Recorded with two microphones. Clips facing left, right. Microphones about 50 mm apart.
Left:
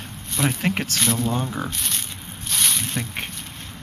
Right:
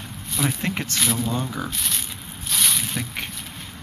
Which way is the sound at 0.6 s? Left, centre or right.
Left.